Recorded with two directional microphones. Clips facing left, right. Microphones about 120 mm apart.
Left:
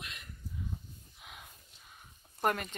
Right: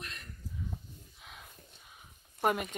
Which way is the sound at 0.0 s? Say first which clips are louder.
Right 2 dB; centre (ahead or behind).